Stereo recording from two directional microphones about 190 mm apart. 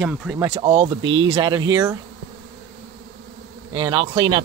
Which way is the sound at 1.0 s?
85° right.